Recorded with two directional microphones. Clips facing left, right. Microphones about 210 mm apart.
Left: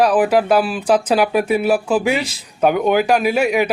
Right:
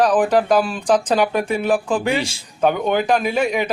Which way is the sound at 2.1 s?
30° right (ahead or behind).